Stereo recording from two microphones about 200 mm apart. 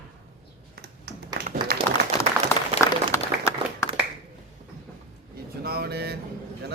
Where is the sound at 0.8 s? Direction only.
55° right (ahead or behind).